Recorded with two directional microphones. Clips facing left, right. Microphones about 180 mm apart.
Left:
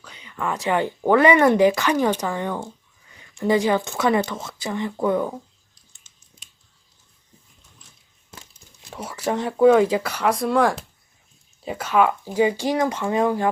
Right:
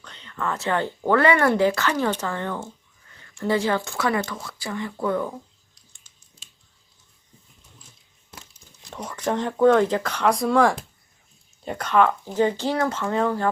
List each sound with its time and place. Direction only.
0.0 s speech: 10° left (ahead or behind)
8.9 s speech: 5° left (ahead or behind)